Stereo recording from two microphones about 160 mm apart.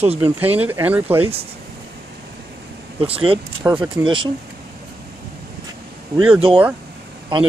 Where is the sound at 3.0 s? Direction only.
35° right (ahead or behind).